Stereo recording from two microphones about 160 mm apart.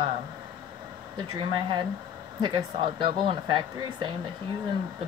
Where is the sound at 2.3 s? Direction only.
30° right (ahead or behind).